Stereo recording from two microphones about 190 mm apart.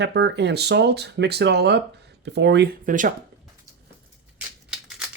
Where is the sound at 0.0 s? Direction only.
60° right (ahead or behind).